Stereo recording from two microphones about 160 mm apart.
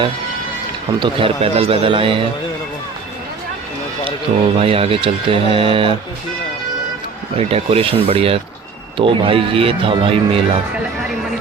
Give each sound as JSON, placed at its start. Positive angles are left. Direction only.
{"t": 0.9, "sound": "speech", "side_deg": -30}
{"t": 4.5, "sound": "speech", "side_deg": -35}
{"t": 7.3, "sound": "speech", "side_deg": -40}